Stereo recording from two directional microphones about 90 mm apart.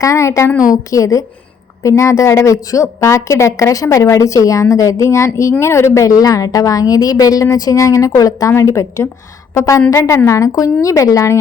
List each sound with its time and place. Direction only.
0.0 s a woman's voice: 35° left (ahead or behind)